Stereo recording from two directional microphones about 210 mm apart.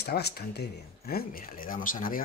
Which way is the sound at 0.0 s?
50° left (ahead or behind).